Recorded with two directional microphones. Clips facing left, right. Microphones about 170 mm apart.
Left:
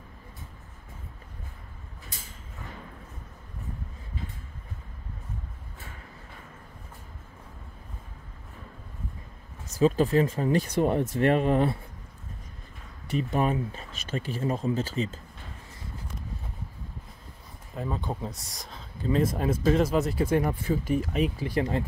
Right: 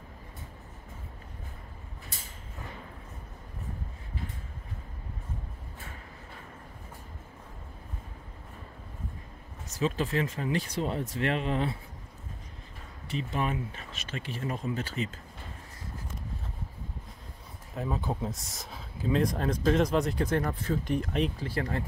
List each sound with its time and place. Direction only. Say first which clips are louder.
9.8 s speech: left 7 dB; 40° left (ahead or behind)
13.1 s speech: left 5 dB; 45° left (ahead or behind)
17.7 s speech: even; 5° right (ahead or behind)
21.5 s speech: left 5 dB; 20° left (ahead or behind)